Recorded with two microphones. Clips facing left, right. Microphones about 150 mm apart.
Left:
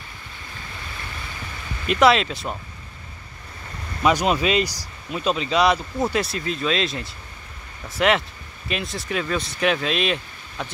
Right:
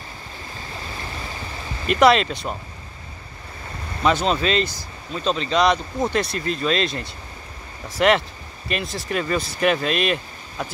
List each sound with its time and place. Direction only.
0.8 s waves: 30° right (ahead or behind)
1.9 s speech: centre (ahead or behind)
4.0 s speech: 10° left (ahead or behind)